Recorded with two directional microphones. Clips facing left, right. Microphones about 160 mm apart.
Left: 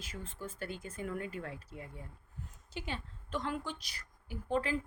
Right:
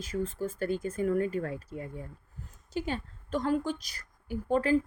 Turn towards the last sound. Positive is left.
turn(degrees=-45)  # may be behind; listen again after turning